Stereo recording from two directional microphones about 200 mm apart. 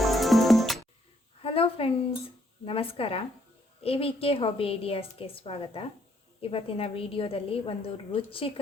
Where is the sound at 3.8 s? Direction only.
30° left (ahead or behind).